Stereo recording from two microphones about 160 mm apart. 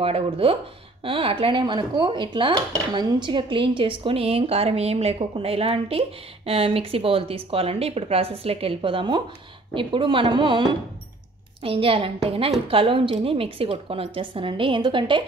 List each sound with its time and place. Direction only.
0.0 s speech: 35° right (ahead or behind)